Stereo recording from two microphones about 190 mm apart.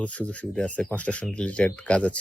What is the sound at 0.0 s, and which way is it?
Speech, 5° left (ahead or behind).